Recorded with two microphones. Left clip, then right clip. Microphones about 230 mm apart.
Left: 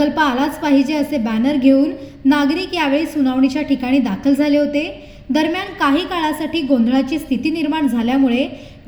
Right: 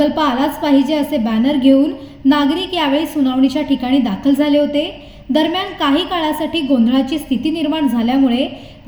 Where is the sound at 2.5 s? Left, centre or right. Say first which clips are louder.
Right 1 dB; left.